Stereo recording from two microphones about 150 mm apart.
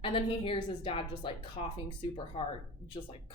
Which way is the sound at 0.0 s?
35° left (ahead or behind).